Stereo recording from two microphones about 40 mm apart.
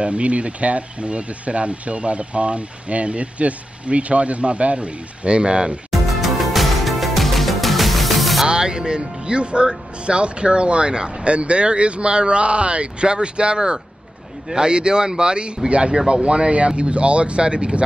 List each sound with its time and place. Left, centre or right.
0.0 s speech: right
5.9 s music: centre
8.5 s speech: right